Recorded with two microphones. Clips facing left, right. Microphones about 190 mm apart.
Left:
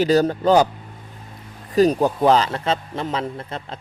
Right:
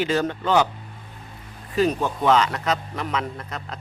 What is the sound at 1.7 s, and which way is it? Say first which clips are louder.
A man's voice: left 5 dB; 40° left (ahead or behind).